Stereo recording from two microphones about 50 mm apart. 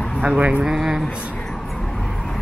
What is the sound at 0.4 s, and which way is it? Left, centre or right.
Speech, right.